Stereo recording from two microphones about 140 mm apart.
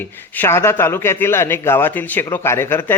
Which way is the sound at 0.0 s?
15° left (ahead or behind).